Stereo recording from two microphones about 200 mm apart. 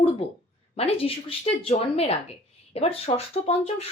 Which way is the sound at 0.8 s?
30° left (ahead or behind).